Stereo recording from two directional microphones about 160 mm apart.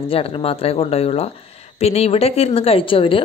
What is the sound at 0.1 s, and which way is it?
A woman's voice, 35° left (ahead or behind).